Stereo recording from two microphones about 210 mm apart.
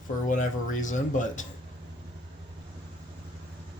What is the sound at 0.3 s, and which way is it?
Speech, 35° left (ahead or behind).